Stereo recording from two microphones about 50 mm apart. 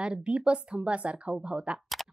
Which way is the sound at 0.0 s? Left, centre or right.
Centre.